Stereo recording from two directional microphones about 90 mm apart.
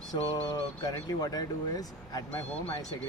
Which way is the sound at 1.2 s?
45° left (ahead or behind).